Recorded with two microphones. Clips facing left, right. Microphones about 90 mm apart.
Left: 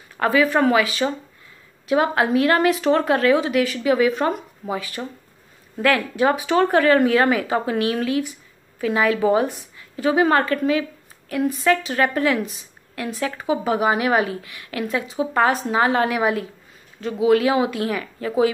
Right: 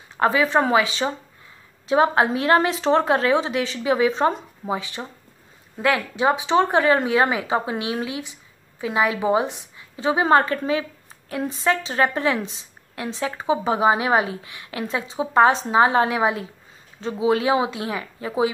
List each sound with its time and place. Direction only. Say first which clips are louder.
0.2 s a woman's voice: left 1 dB; 25° right (ahead or behind)